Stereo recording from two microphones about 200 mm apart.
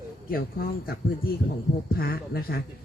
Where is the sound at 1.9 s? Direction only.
50° left (ahead or behind).